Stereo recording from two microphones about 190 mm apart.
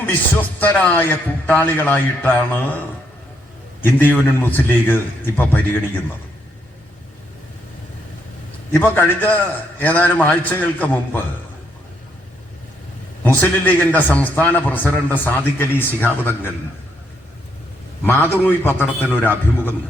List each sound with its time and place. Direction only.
0.6 s a man's voice: 5° left (ahead or behind)
8.7 s a man's voice: 10° left (ahead or behind)
13.2 s a man's voice: 10° left (ahead or behind)
18.0 s a man's voice: 10° left (ahead or behind)